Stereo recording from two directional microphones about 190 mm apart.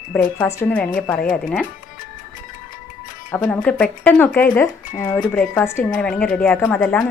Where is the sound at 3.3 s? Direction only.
10° left (ahead or behind).